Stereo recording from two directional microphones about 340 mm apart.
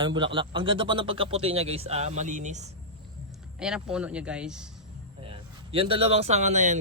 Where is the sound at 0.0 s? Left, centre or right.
Centre.